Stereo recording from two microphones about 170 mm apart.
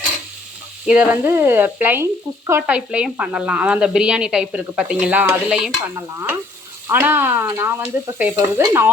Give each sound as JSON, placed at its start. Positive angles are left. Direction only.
{"t": 0.9, "sound": "frying", "side_deg": -10}